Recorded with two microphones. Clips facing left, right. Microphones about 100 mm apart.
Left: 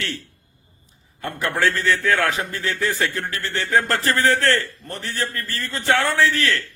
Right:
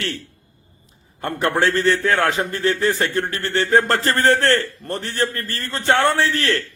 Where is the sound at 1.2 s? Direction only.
40° right (ahead or behind).